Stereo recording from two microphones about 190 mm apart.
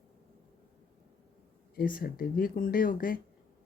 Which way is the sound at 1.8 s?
50° left (ahead or behind).